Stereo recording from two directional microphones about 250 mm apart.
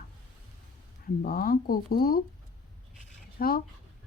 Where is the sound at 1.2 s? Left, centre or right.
Left.